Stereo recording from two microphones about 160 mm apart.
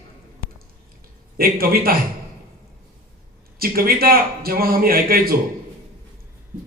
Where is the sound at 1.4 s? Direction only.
70° right (ahead or behind).